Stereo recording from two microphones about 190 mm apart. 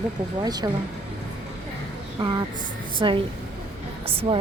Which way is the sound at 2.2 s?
20° right (ahead or behind).